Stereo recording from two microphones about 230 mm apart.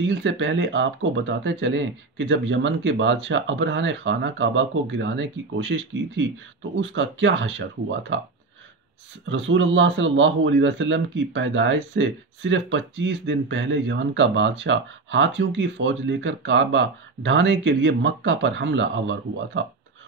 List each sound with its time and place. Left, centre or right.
0.0 s speech: right
9.3 s speech: right